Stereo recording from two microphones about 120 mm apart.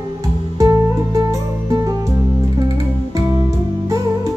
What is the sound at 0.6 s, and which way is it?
Music, 25° right (ahead or behind).